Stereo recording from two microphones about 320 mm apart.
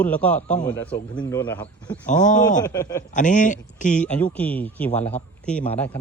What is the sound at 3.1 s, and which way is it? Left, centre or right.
Speech, left.